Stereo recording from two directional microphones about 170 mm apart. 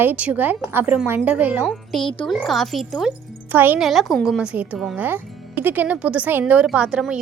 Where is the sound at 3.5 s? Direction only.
10° right (ahead or behind).